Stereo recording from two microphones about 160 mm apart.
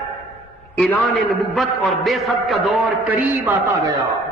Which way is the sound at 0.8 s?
Centre (ahead or behind).